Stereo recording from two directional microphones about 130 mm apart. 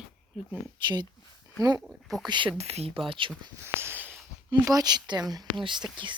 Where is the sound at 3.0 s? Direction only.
40° right (ahead or behind).